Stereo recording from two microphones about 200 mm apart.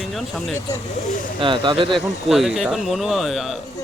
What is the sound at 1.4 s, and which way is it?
Speech, 25° right (ahead or behind).